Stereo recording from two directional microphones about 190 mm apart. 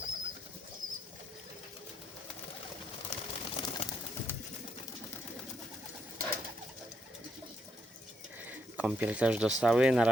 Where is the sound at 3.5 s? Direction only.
30° left (ahead or behind).